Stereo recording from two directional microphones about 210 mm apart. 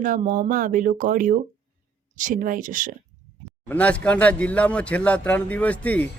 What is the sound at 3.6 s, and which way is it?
Speech, 5° left (ahead or behind).